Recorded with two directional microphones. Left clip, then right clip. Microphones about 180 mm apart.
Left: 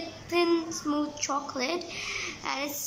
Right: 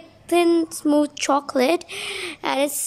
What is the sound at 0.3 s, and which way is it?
Speech, 50° right (ahead or behind).